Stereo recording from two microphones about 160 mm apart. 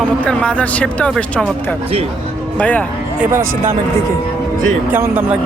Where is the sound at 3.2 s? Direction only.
15° right (ahead or behind).